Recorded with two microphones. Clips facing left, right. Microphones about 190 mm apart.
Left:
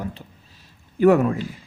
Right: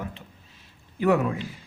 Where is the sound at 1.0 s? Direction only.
45° left (ahead or behind).